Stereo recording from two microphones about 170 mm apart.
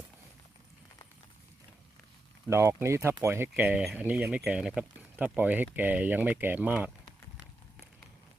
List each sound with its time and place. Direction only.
2.5 s speech: 15° right (ahead or behind)